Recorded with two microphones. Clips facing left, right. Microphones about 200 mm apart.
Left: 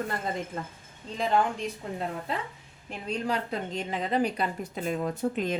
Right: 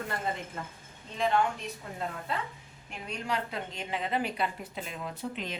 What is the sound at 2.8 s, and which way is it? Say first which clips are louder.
A woman's voice: left 5 dB; 35° left (ahead or behind).